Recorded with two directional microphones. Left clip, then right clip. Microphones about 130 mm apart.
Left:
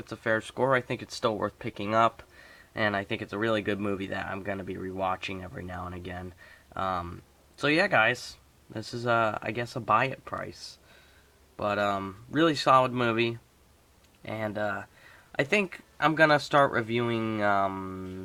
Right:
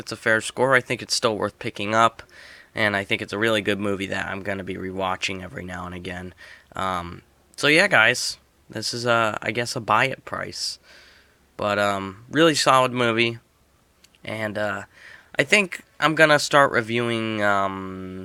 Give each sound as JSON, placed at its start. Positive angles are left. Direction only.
{"t": 0.0, "sound": "speech", "side_deg": -30}